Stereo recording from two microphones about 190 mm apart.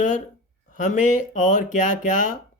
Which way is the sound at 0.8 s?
40° left (ahead or behind).